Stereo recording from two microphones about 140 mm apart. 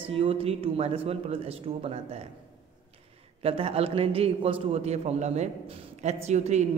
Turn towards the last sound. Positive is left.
turn(degrees=-55)  # may be behind; listen again after turning